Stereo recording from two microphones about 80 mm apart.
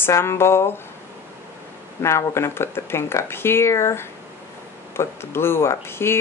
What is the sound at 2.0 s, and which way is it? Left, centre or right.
Speech, left.